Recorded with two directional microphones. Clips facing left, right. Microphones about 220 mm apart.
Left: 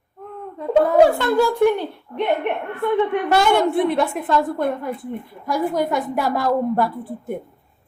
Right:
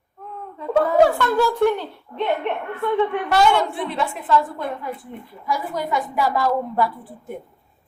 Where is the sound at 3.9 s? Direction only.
50° left (ahead or behind).